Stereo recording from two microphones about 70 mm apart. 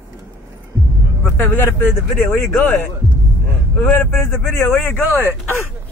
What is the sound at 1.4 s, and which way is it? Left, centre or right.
Speech, left.